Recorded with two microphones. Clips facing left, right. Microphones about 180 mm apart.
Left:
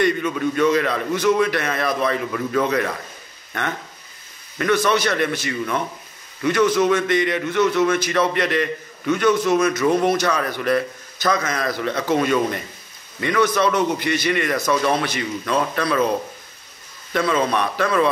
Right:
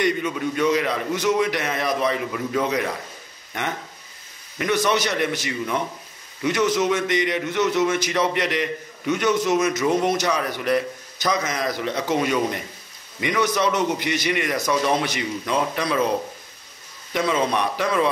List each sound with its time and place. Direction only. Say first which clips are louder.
0.0 s a man's voice: left 3 dB; 15° right (ahead or behind)
4.6 s a man's voice: left 2 dB; 15° right (ahead or behind)
17.1 s a man's voice: left 2 dB; 15° right (ahead or behind)